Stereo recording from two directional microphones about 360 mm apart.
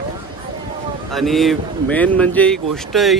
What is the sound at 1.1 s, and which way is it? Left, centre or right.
Speech, centre.